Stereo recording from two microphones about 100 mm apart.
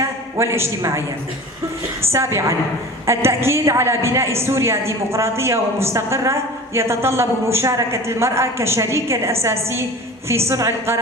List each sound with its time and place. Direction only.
0.0 s a man's voice: 30° right (ahead or behind)
2.1 s a woman's voice: 30° right (ahead or behind)